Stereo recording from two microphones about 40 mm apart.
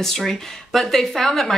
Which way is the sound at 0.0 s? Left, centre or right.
Centre.